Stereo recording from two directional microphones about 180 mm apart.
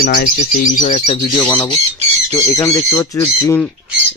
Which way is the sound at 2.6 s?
15° left (ahead or behind).